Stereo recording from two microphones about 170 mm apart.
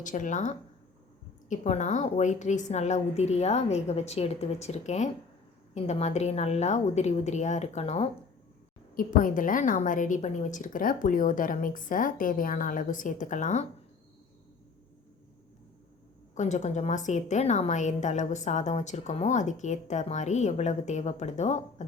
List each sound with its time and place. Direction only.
0.0 s a woman's voice: 50° left (ahead or behind)
9.0 s a woman's voice: 55° left (ahead or behind)
16.3 s a woman's voice: 45° left (ahead or behind)